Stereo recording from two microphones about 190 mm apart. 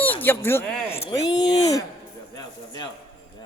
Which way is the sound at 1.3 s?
20° left (ahead or behind).